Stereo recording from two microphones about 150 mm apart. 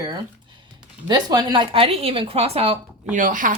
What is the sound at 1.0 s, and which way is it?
Speech, 25° right (ahead or behind).